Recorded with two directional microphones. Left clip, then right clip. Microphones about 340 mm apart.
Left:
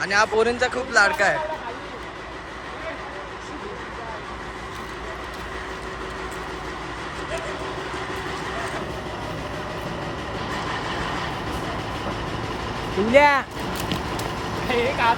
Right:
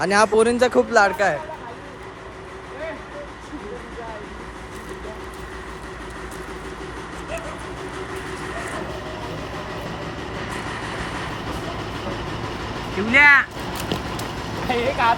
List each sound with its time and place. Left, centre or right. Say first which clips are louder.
0.0 s speech: right 3 dB; centre
0.9 s speech: left 2 dB; centre
11.4 s vehicle: left 1 dB; centre